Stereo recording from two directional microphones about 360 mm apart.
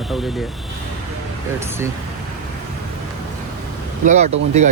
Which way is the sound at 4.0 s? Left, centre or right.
Centre.